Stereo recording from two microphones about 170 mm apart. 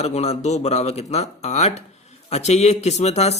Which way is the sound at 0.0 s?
40° left (ahead or behind).